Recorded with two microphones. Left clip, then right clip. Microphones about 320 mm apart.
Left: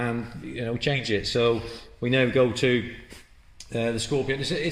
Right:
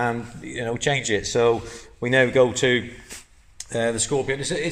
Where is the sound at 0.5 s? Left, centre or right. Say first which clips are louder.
Right 4 dB; right.